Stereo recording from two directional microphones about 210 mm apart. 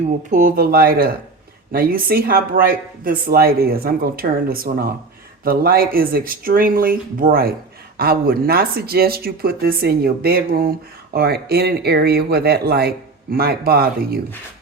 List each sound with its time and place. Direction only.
0.3 s speech: 40° right (ahead or behind)